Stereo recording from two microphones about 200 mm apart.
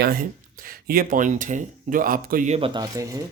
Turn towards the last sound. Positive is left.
turn(degrees=-15)  # may be behind; listen again after turning